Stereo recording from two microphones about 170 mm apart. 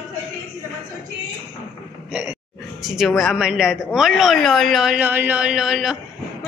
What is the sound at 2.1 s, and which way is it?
A woman's voice, 10° right (ahead or behind).